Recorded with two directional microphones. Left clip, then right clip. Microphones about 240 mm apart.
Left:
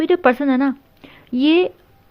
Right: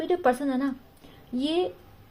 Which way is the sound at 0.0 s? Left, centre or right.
Left.